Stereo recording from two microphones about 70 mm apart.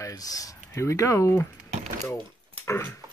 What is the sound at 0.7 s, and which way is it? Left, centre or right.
Speech, left.